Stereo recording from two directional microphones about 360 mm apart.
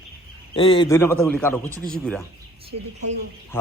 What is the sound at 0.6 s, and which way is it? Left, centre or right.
Speech, left.